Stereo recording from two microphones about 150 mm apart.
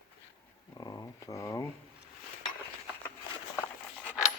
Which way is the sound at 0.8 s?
20° left (ahead or behind).